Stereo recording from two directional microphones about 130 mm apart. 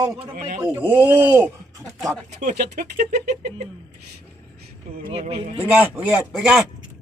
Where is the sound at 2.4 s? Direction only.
70° right (ahead or behind).